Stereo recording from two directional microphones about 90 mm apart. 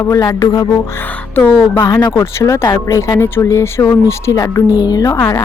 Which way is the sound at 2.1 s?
35° left (ahead or behind).